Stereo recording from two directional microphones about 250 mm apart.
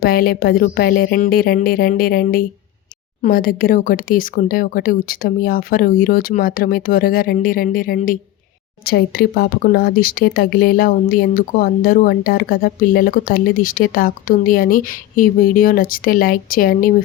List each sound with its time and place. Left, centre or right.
0.0 s speech: left